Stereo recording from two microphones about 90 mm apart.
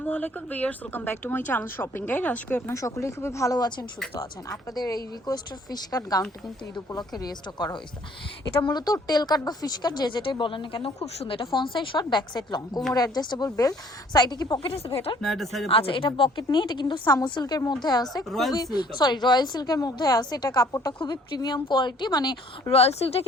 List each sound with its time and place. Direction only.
0.0 s speech: 20° left (ahead or behind)
2.6 s a woman's voice: 35° left (ahead or behind); by 14.6 s 50° left (ahead or behind)
14.6 s speech: 90° left
15.2 s speech: 5° left (ahead or behind)
15.7 s speech: 90° left
16.4 s speech: 55° left (ahead or behind)
17.4 s a woman's voice: 45° left (ahead or behind)
18.3 s speech: centre (ahead or behind)
18.5 s a woman's voice: 50° left (ahead or behind)
21.0 s speech: 55° left (ahead or behind)
22.7 s speech: 90° left